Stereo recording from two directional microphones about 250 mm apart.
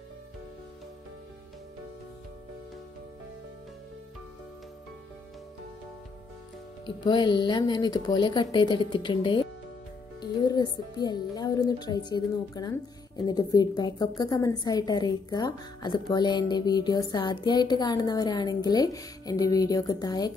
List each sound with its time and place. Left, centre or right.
7.1 s speech: centre